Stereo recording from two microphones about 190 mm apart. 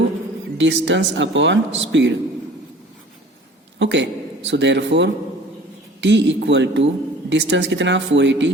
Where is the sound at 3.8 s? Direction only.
70° right (ahead or behind).